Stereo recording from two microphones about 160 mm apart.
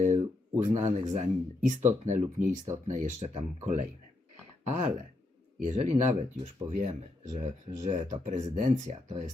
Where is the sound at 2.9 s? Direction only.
50° right (ahead or behind).